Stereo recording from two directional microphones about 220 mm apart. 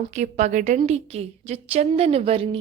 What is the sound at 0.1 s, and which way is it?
A woman's voice, 30° right (ahead or behind).